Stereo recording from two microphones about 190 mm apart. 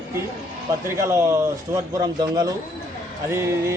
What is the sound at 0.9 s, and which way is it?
A man's voice, 15° right (ahead or behind).